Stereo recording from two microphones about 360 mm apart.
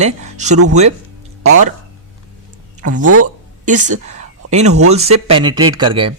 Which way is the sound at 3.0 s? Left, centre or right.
Right.